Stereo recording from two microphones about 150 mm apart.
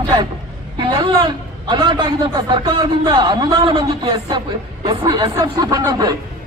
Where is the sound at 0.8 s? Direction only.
30° right (ahead or behind).